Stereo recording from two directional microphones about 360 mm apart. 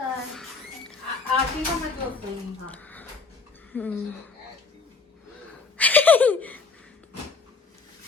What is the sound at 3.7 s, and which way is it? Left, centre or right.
Speech, centre.